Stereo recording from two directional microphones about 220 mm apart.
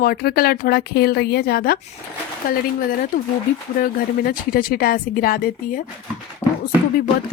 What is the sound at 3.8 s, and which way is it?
Speech, 40° left (ahead or behind).